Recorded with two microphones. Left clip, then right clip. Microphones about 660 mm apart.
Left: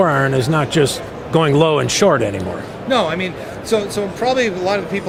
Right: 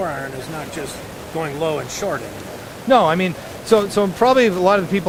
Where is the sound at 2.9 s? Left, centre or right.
Right.